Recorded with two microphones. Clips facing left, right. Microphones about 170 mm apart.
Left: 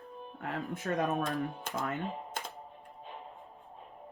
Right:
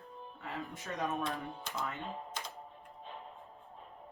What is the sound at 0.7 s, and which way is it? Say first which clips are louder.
Speech: left 6 dB; 60° left (ahead or behind).